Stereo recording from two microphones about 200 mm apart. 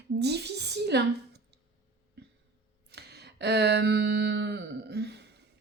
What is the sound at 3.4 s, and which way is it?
Speech, 55° right (ahead or behind).